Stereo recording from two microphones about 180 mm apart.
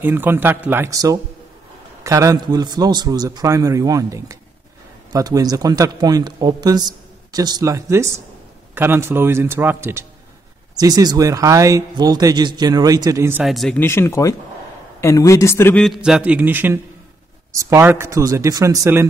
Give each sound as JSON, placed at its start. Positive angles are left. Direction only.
{"t": 0.0, "sound": "speech", "side_deg": -10}
{"t": 13.4, "sound": "speech", "side_deg": 0}
{"t": 13.8, "sound": "a man's voice", "side_deg": 15}
{"t": 15.8, "sound": "speech", "side_deg": 0}